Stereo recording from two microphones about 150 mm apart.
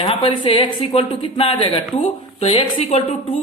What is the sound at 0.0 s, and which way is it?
Speech, 40° left (ahead or behind).